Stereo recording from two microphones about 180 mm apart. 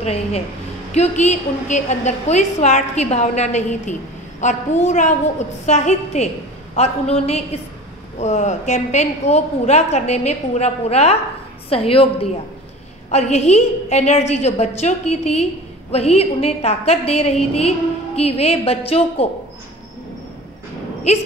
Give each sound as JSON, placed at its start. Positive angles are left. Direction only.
{"t": 0.0, "sound": "a woman's voice", "side_deg": 35}